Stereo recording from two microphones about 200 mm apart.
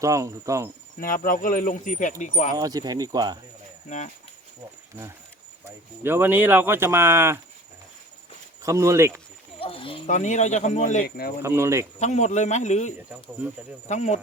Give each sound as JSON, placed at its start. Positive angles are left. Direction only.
{"t": 0.0, "sound": "speech", "side_deg": -15}
{"t": 1.0, "sound": "speech", "side_deg": 45}
{"t": 2.6, "sound": "speech", "side_deg": -20}
{"t": 3.8, "sound": "speech", "side_deg": 35}
{"t": 6.0, "sound": "speech", "side_deg": -10}
{"t": 8.6, "sound": "speech", "side_deg": -15}
{"t": 9.6, "sound": "speech", "side_deg": 25}
{"t": 11.2, "sound": "speech", "side_deg": 50}
{"t": 11.4, "sound": "speech", "side_deg": -15}
{"t": 11.9, "sound": "speech", "side_deg": 35}